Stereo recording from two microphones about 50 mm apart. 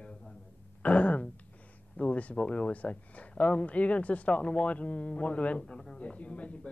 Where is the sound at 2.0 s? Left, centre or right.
Left.